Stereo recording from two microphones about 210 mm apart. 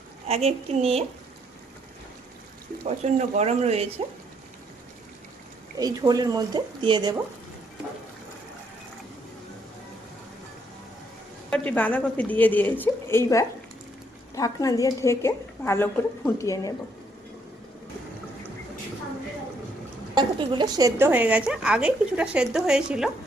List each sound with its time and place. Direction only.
0.3 s speech: 30° right (ahead or behind)
2.8 s speech: 35° right (ahead or behind)
5.7 s speech: 15° right (ahead or behind)
11.5 s a woman's voice: 5° left (ahead or behind)
20.1 s a woman's voice: 20° right (ahead or behind); by 23.0 s 5° right (ahead or behind)